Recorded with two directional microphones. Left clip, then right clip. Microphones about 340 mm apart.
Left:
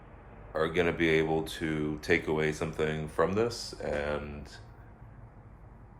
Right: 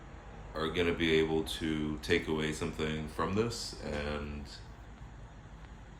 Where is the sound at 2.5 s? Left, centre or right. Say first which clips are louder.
Left 4 dB; centre.